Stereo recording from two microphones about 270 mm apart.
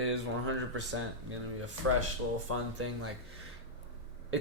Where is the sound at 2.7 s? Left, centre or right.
Right.